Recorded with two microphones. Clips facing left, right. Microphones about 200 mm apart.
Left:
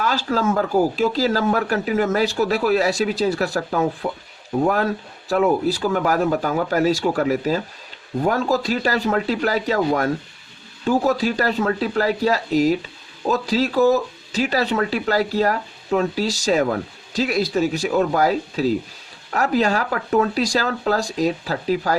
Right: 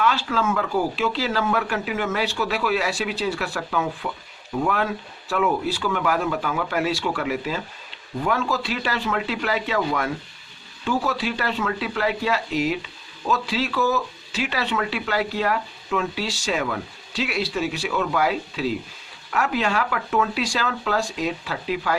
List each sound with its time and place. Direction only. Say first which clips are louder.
0.0 s speech: left 2 dB; 40° left (ahead or behind)